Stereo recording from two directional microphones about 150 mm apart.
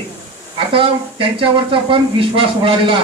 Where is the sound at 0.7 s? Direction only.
35° right (ahead or behind).